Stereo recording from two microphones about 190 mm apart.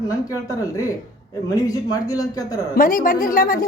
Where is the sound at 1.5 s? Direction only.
20° left (ahead or behind).